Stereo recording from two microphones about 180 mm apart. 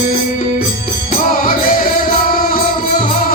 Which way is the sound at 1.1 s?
50° left (ahead or behind).